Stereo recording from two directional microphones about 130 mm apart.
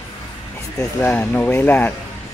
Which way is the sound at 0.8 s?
15° left (ahead or behind).